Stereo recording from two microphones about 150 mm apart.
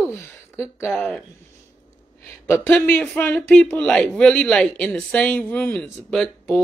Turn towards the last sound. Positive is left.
turn(degrees=5)  # may be behind; listen again after turning